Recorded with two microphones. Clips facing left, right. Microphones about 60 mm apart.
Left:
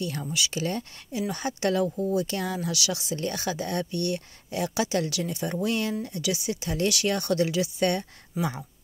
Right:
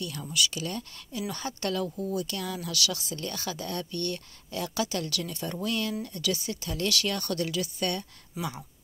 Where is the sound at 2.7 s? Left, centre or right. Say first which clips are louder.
Left 2 dB; centre.